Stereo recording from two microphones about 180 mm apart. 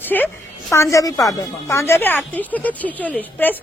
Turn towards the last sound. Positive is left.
turn(degrees=10)  # may be behind; listen again after turning